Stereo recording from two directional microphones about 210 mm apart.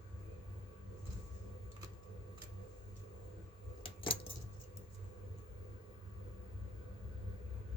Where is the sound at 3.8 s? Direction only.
25° left (ahead or behind).